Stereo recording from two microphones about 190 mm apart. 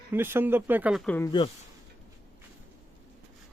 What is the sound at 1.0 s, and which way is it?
Speech, 10° left (ahead or behind).